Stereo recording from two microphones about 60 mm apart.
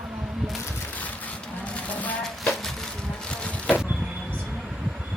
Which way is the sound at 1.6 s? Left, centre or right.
Left.